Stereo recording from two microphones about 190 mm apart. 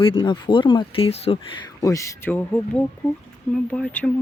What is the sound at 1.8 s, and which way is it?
Speech, 15° left (ahead or behind).